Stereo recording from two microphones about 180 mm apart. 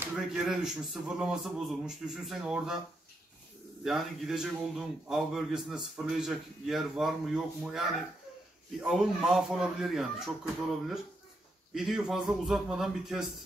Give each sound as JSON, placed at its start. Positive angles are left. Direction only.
{"t": 0.0, "sound": "a man's voice", "side_deg": -5}
{"t": 3.8, "sound": "a man's voice", "side_deg": 0}
{"t": 8.8, "sound": "a man's voice", "side_deg": 0}